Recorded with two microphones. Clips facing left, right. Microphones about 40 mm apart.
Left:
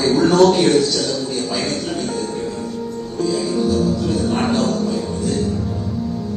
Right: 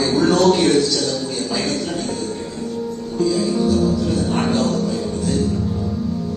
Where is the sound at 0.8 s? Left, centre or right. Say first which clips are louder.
Even; left.